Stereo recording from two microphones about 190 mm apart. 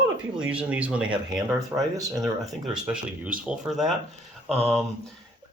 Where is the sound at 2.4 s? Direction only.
5° right (ahead or behind).